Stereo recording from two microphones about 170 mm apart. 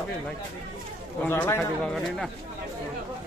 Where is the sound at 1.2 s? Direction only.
15° left (ahead or behind).